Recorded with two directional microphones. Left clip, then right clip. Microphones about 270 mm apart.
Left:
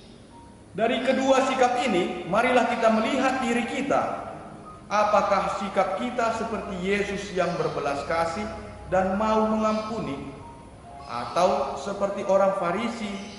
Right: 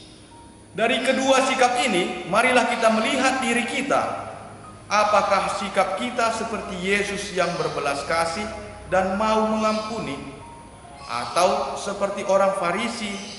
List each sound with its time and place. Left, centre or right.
0.7 s a man's voice: centre
8.9 s a man's voice: centre
11.4 s a man's voice: left
12.0 s a man's voice: centre